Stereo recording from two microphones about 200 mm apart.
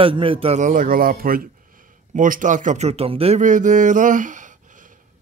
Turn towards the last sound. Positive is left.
turn(degrees=-40)  # may be behind; listen again after turning